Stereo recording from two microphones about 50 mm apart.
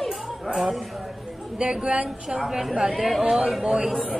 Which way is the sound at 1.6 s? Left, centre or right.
Centre.